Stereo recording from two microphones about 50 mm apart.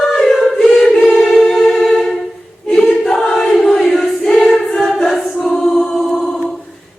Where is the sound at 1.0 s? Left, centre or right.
Centre.